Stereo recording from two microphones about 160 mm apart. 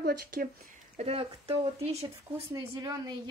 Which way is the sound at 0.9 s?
40° right (ahead or behind).